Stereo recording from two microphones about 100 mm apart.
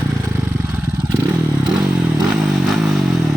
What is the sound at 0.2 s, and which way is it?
Vehicle, 30° right (ahead or behind).